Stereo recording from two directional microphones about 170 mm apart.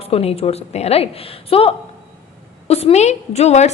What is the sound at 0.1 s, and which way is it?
A woman's voice, 35° left (ahead or behind).